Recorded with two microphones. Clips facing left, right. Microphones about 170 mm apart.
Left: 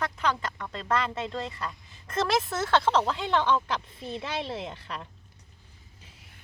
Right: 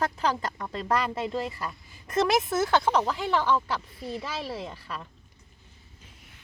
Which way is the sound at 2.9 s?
5° right (ahead or behind).